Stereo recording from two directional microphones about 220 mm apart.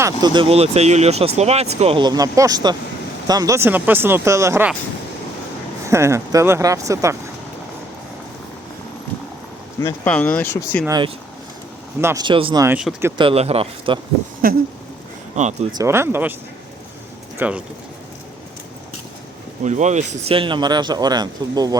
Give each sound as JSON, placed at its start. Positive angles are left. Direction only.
{"t": 0.0, "sound": "speech", "side_deg": -20}
{"t": 5.9, "sound": "speech", "side_deg": -15}
{"t": 9.8, "sound": "speech", "side_deg": 10}
{"t": 10.8, "sound": "speech", "side_deg": -20}
{"t": 12.6, "sound": "speech", "side_deg": -10}
{"t": 13.1, "sound": "speech", "side_deg": -25}
{"t": 14.4, "sound": "a sound", "side_deg": -40}
{"t": 15.8, "sound": "speech", "side_deg": -10}
{"t": 17.3, "sound": "speech", "side_deg": -5}
{"t": 19.6, "sound": "speech", "side_deg": -30}